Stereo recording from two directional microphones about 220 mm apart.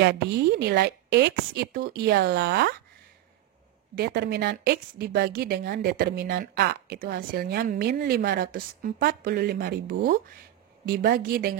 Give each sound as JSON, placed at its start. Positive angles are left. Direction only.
{"t": 0.0, "sound": "a woman's voice", "side_deg": -45}
{"t": 3.9, "sound": "a woman's voice", "side_deg": -45}